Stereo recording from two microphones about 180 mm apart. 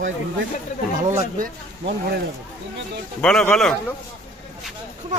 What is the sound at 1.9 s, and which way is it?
Speech, 60° right (ahead or behind).